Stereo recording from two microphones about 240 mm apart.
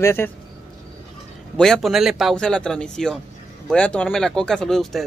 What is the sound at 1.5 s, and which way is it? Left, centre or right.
Speech, centre.